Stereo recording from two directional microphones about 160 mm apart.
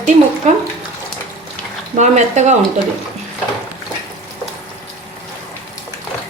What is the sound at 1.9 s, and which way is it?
Speech, 45° right (ahead or behind).